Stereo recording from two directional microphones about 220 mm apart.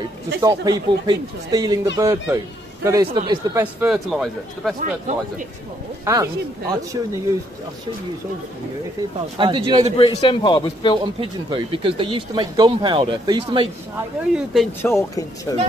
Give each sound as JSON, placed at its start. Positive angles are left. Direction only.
{"t": 0.4, "sound": "speech", "side_deg": -20}
{"t": 4.7, "sound": "speech", "side_deg": -35}
{"t": 6.0, "sound": "speech", "side_deg": -15}
{"t": 9.4, "sound": "speech", "side_deg": -20}
{"t": 9.9, "sound": "a man's voice", "side_deg": 25}
{"t": 11.1, "sound": "speech", "side_deg": -25}
{"t": 14.5, "sound": "speech", "side_deg": 5}